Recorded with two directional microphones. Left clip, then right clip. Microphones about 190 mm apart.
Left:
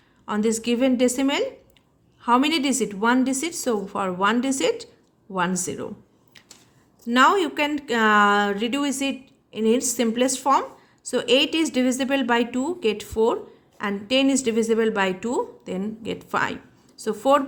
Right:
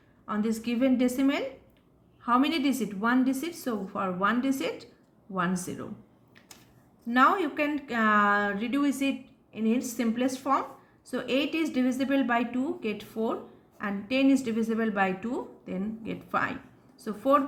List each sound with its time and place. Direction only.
0.3 s a woman's voice: 45° left (ahead or behind)
7.0 s speech: 50° left (ahead or behind)